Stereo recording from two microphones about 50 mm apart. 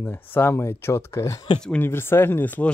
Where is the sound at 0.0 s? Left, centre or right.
Left.